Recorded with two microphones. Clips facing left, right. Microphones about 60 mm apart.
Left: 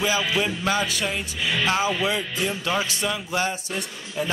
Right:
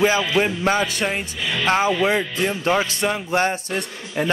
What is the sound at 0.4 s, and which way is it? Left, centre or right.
Music, right.